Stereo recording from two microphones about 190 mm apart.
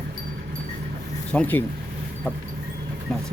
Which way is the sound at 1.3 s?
10° left (ahead or behind).